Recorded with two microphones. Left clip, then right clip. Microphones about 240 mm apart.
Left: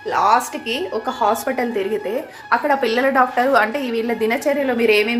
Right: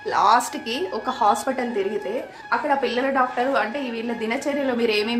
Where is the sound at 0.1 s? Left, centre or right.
Centre.